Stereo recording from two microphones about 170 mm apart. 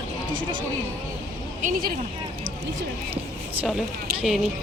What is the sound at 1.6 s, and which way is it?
Speech, 60° right (ahead or behind).